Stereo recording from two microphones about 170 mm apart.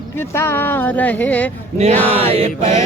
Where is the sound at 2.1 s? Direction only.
40° right (ahead or behind).